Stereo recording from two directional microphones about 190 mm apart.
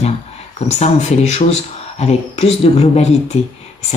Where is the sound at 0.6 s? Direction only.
35° left (ahead or behind).